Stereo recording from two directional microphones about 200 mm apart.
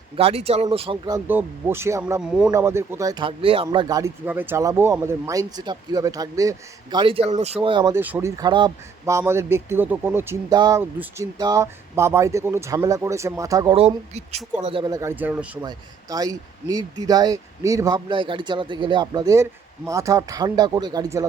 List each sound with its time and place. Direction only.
0.2 s speech: 30° right (ahead or behind)
13.7 s speech: 30° right (ahead or behind)